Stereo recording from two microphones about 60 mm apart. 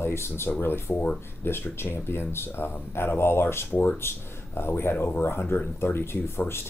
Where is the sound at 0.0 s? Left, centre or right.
Left.